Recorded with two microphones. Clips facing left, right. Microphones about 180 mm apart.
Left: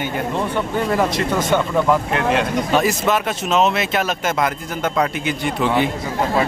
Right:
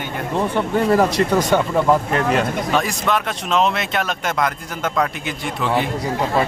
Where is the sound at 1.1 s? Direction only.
40° right (ahead or behind).